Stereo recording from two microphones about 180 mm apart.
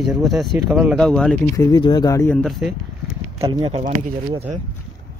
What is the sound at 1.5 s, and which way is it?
Speech, 20° left (ahead or behind).